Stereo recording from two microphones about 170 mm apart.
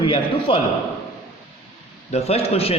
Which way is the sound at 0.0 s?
30° left (ahead or behind).